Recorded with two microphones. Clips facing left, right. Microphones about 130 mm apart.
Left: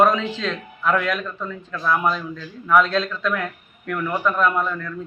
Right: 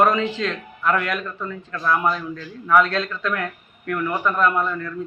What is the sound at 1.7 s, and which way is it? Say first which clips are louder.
Speech: even; 5° left (ahead or behind).